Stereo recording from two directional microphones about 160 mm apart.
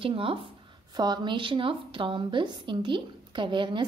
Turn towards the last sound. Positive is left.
turn(degrees=-30)  # may be behind; listen again after turning